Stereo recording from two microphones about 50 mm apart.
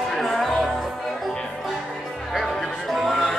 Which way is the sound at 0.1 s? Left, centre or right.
Centre.